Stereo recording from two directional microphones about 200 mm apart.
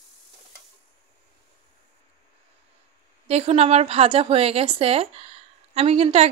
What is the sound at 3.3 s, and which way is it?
A woman's voice, 30° right (ahead or behind).